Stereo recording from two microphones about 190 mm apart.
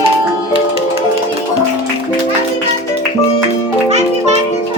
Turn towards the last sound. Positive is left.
turn(degrees=-35)  # may be behind; listen again after turning